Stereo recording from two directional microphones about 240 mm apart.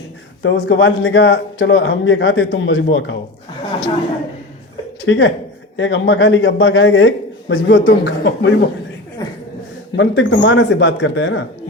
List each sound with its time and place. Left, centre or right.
0.4 s a man's voice: left
5.0 s a man's voice: left
9.2 s a sound: centre
9.9 s a man's voice: left